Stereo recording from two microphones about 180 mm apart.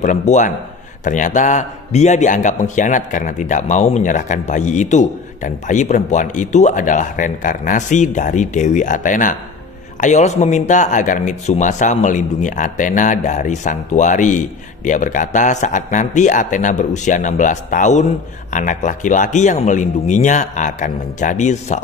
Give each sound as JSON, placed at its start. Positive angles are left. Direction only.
{"t": 0.0, "sound": "a man's voice", "side_deg": 40}